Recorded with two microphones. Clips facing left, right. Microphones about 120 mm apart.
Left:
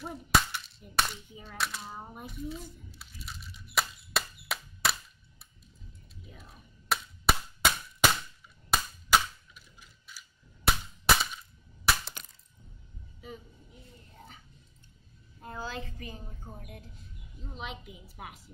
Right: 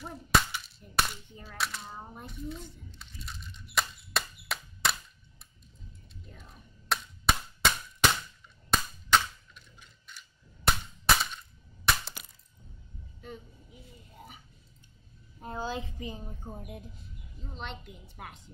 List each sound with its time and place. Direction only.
0.0 s cap gun: centre (ahead or behind)
6.2 s a sound: 5° left (ahead or behind)
8.6 s cap gun: 5° left (ahead or behind)
11.2 s breaking: 5° left (ahead or behind)
13.2 s a sound: centre (ahead or behind)
15.4 s a woman's voice: 20° right (ahead or behind)
16.9 s speech: centre (ahead or behind)